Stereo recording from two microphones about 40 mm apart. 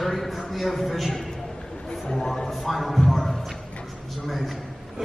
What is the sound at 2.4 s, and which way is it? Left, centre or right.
Speech, centre.